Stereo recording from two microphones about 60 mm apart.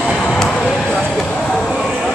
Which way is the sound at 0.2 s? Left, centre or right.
Centre.